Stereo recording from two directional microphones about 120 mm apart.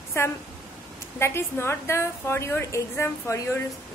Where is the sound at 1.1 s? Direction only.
20° left (ahead or behind).